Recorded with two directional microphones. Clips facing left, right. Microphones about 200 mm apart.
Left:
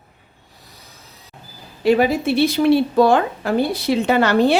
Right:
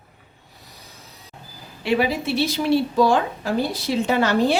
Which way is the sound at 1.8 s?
45° left (ahead or behind).